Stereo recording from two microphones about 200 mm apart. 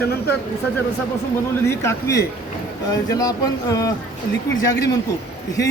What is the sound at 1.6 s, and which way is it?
A woman's voice, 15° left (ahead or behind).